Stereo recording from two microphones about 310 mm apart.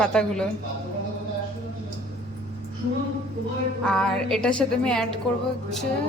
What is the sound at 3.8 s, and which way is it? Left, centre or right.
A woman's voice, centre.